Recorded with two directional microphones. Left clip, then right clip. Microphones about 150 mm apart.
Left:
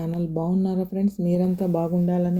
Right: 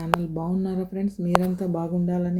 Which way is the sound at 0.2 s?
25° left (ahead or behind).